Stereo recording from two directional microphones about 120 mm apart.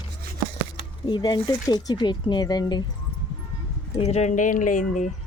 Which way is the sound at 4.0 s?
65° left (ahead or behind).